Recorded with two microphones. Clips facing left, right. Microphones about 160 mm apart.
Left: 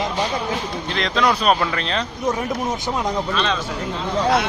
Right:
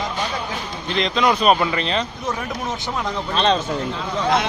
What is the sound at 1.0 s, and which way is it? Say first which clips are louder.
Speech: right 1 dB; 5° right (ahead or behind).